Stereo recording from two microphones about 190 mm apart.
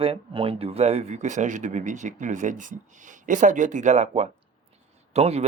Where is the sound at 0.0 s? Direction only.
30° right (ahead or behind).